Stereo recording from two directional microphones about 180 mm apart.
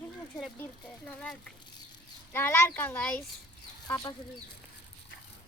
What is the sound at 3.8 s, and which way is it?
Speech, 20° left (ahead or behind).